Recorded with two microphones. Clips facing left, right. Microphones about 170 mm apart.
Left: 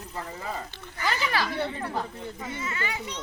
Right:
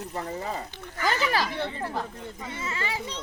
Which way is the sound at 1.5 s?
Centre (ahead or behind).